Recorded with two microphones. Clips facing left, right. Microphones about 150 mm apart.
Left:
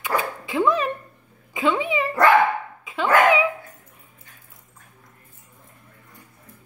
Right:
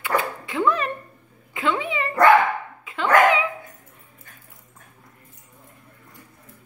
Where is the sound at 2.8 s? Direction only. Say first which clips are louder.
Right 1 dB; 15° left (ahead or behind).